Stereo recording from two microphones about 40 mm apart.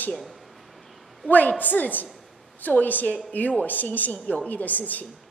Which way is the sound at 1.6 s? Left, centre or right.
Left.